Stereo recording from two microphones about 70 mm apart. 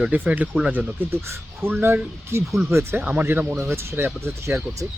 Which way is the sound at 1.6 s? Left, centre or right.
Right.